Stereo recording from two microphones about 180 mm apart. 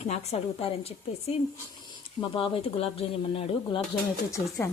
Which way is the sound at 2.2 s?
30° left (ahead or behind).